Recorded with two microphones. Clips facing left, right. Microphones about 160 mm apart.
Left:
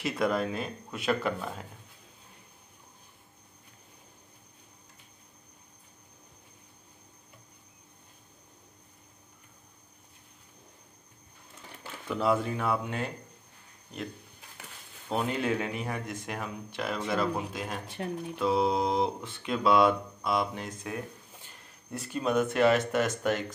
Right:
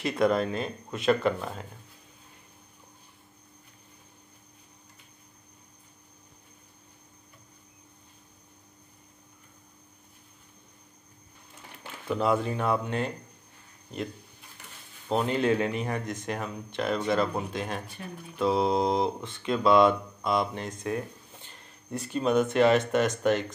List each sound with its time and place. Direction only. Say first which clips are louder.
0.2 s speech: right 4 dB; 5° left (ahead or behind)
12.2 s speech: right 1 dB; centre (ahead or behind)
15.1 s speech: right 4 dB; 5° left (ahead or behind)
17.8 s speech: left 6 dB; 90° left
18.4 s speech: right 2 dB; 5° left (ahead or behind)